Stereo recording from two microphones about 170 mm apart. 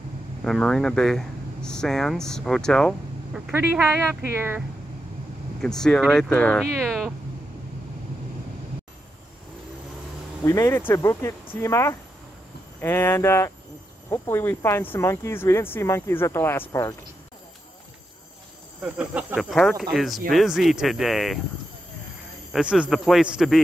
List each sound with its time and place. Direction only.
0.4 s speech: 5° left (ahead or behind); by 4.6 s 10° right (ahead or behind)
5.6 s speech: 5° left (ahead or behind)
10.4 s speech: 15° left (ahead or behind)
18.8 s speech: 10° right (ahead or behind)
22.5 s speech: 5° right (ahead or behind)